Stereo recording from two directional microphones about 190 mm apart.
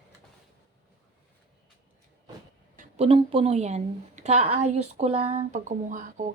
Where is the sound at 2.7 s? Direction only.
35° right (ahead or behind).